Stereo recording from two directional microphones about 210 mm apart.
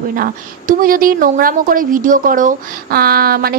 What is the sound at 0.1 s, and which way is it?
A woman's voice, 40° right (ahead or behind).